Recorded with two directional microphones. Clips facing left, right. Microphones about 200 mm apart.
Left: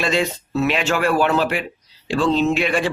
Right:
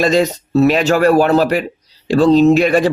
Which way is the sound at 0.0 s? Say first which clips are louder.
Right 7 dB; 40° right (ahead or behind).